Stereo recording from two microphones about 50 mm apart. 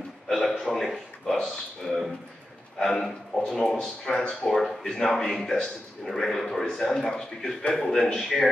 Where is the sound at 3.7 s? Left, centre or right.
Centre.